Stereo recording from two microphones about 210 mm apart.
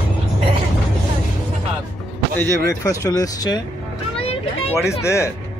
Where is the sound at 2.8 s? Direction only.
15° left (ahead or behind).